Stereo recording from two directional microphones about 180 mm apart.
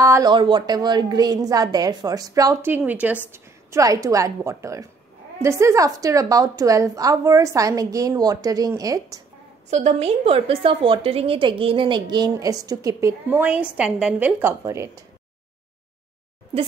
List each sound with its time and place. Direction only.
0.0 s a woman's voice: 20° right (ahead or behind)
9.7 s a woman's voice: 40° right (ahead or behind); by 14.9 s 15° right (ahead or behind)